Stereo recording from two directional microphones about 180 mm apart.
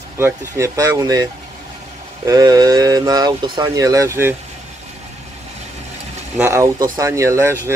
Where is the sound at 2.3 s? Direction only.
20° right (ahead or behind).